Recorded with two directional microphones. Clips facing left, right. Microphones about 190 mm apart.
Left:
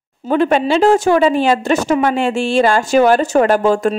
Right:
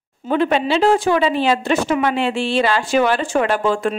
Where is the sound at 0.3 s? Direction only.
45° left (ahead or behind).